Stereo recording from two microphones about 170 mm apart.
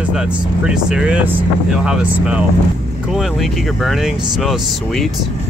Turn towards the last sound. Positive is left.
turn(degrees=0)  # may be behind; listen again after turning